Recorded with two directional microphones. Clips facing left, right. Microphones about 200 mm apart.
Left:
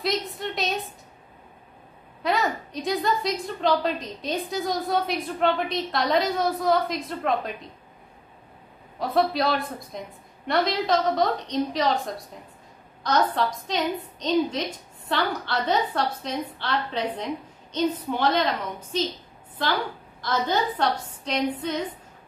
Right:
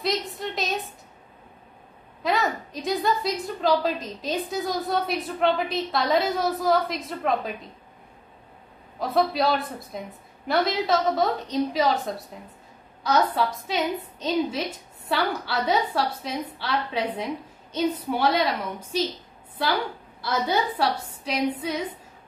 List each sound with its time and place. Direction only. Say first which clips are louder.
0.0 s a sound: even; centre (ahead or behind)
2.2 s a woman's voice: even; centre (ahead or behind)
9.0 s a woman's voice: even; centre (ahead or behind)
13.0 s a woman's voice: right 1 dB; 5° right (ahead or behind)
20.2 s a woman's voice: even; 10° right (ahead or behind)